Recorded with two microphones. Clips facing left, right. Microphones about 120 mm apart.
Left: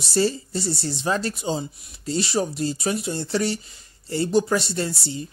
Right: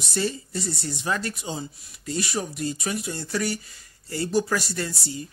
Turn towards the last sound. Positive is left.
turn(degrees=25)  # may be behind; listen again after turning